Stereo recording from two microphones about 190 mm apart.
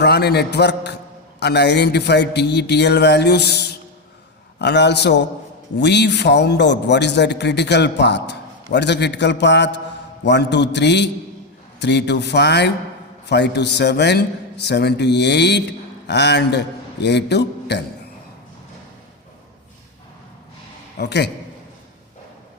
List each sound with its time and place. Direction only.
0.0 s a man's voice: 60° left (ahead or behind)
21.0 s a man's voice: 60° left (ahead or behind)